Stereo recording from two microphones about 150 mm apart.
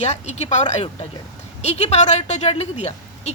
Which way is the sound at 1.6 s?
45° left (ahead or behind).